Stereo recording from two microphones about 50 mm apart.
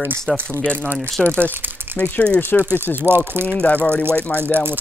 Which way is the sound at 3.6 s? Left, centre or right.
Left.